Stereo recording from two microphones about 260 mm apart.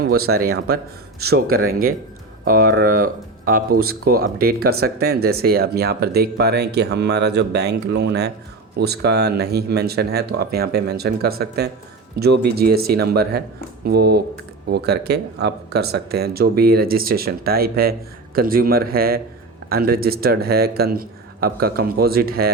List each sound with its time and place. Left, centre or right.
0.0 s speech: right